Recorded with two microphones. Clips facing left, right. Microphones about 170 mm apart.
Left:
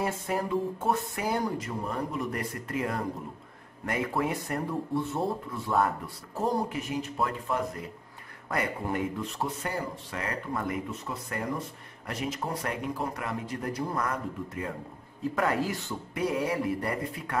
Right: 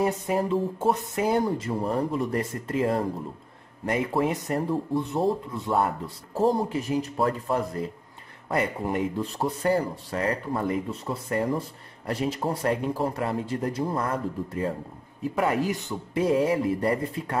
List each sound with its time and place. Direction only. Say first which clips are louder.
0.0 s speech: right 5 dB; 25° right (ahead or behind)
9.2 s speech: right 6 dB; 35° right (ahead or behind)
15.3 s speech: right 4 dB; 20° right (ahead or behind)